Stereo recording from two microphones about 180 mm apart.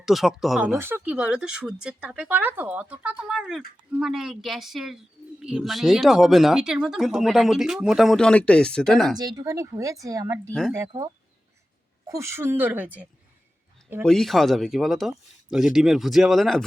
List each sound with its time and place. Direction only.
0.0 s speech: centre (ahead or behind)
0.8 s speech: 10° right (ahead or behind)
9.1 s speech: 20° right (ahead or behind)
10.5 s speech: 5° left (ahead or behind)
10.8 s speech: 20° right (ahead or behind)
14.0 s speech: 5° left (ahead or behind)